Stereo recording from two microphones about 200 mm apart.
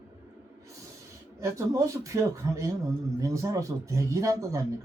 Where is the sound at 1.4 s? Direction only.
15° right (ahead or behind).